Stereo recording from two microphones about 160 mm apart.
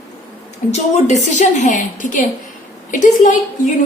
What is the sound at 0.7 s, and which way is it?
A woman's voice, 45° left (ahead or behind).